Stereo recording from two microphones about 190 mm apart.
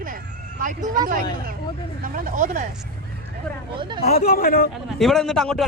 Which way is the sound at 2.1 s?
40° right (ahead or behind).